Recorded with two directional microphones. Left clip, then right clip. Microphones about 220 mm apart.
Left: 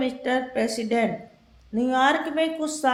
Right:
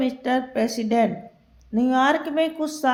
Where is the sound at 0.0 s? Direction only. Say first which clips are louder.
Right 1 dB; 30° right (ahead or behind).